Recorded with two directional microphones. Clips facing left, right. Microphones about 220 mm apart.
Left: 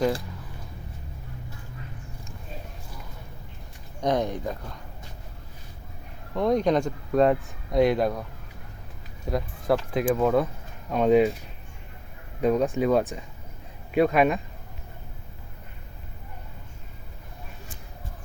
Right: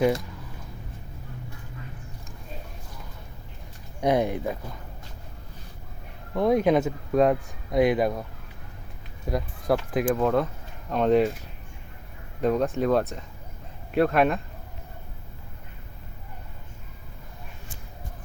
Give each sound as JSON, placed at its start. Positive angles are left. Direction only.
{"t": 4.0, "sound": "speech", "side_deg": -10}
{"t": 6.3, "sound": "speech", "side_deg": -5}
{"t": 9.3, "sound": "speech", "side_deg": 0}
{"t": 12.4, "sound": "speech", "side_deg": 0}